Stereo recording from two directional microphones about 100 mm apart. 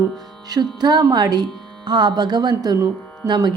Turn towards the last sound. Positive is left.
turn(degrees=-45)  # may be behind; listen again after turning